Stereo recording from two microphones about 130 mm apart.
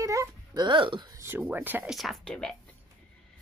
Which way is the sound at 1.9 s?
Centre (ahead or behind).